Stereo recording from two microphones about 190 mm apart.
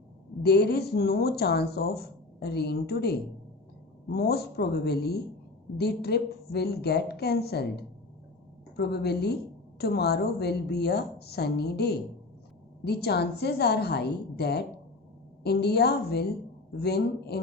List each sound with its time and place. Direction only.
0.4 s a woman's voice: 60° left (ahead or behind)
8.7 s a woman's voice: 60° left (ahead or behind)